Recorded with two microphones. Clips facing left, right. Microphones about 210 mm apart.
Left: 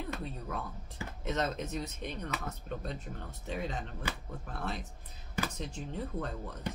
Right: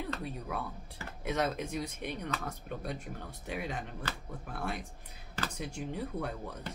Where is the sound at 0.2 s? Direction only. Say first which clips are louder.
Right 1 dB; 10° right (ahead or behind).